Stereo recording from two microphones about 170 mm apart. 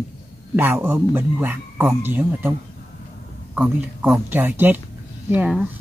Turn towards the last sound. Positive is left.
turn(degrees=-5)  # may be behind; listen again after turning